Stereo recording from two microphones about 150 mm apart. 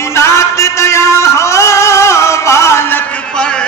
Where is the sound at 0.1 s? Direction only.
20° left (ahead or behind).